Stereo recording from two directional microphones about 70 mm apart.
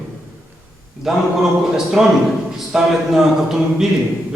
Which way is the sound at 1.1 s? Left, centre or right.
Centre.